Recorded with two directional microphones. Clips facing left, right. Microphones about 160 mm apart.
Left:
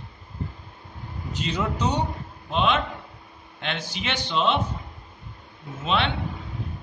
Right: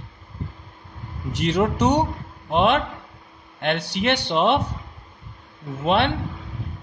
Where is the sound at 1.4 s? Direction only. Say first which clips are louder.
Right 7 dB; 75° right (ahead or behind).